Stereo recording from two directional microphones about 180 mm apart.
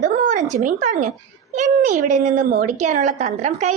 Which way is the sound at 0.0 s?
45° right (ahead or behind).